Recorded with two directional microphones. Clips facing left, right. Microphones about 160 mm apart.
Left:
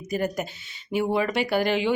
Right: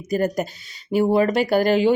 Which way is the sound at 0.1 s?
40° right (ahead or behind).